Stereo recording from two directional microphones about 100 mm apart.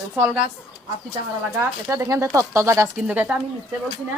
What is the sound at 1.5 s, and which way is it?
Speech, 25° right (ahead or behind).